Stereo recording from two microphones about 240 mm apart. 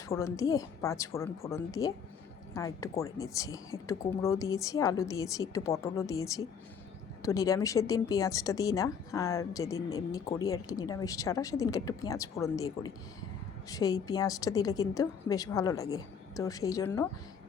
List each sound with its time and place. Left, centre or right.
0.1 s speech: centre